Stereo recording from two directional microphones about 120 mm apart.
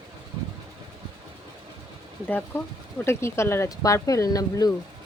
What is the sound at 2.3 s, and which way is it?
Speech, 15° left (ahead or behind).